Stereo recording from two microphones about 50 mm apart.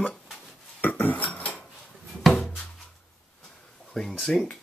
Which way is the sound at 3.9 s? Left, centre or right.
Centre.